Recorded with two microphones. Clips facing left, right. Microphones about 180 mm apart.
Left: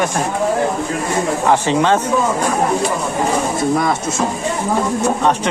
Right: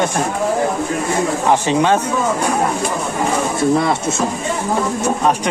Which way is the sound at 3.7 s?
30° right (ahead or behind).